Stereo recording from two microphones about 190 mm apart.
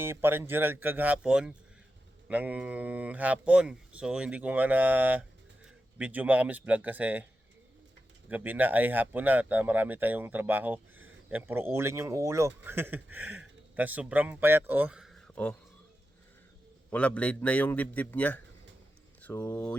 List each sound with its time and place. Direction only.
0.0 s speech: 10° right (ahead or behind)
8.3 s speech: 10° right (ahead or behind)
16.9 s a man's voice: 5° left (ahead or behind)